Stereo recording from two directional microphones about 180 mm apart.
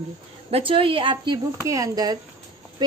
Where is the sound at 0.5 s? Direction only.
30° right (ahead or behind).